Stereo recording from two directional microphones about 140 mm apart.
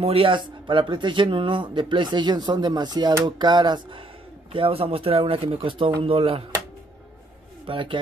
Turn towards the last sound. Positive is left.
turn(degrees=-35)  # may be behind; listen again after turning